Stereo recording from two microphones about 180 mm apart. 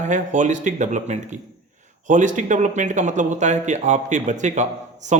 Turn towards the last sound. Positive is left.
turn(degrees=-40)  # may be behind; listen again after turning